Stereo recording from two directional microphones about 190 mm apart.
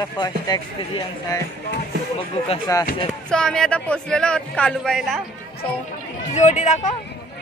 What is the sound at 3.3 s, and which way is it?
Speech, 5° left (ahead or behind).